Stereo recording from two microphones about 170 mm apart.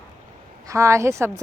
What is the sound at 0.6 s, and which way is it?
Speech, 15° right (ahead or behind).